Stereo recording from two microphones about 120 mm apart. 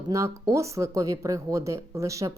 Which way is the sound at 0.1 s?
25° right (ahead or behind).